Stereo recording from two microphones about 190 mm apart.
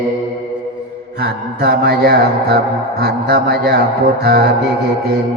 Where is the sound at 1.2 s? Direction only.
55° right (ahead or behind).